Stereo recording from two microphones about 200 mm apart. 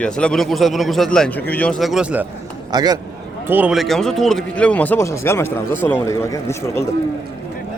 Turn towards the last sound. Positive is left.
turn(degrees=15)  # may be behind; listen again after turning